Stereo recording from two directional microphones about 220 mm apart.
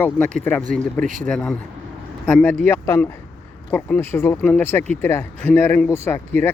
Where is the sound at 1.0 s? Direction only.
35° right (ahead or behind).